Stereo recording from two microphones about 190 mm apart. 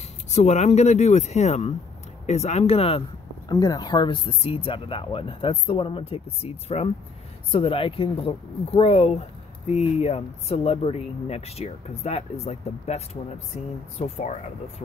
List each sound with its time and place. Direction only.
0.3 s speech: 35° left (ahead or behind)
3.4 s speech: 20° left (ahead or behind)